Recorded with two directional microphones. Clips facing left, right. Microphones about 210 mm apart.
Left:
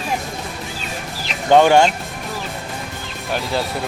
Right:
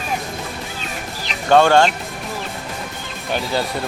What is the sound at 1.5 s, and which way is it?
Speech, 15° left (ahead or behind).